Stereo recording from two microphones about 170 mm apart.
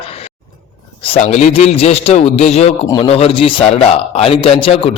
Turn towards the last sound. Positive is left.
turn(degrees=35)  # may be behind; listen again after turning